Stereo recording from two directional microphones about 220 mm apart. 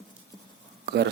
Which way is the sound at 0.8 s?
50° right (ahead or behind).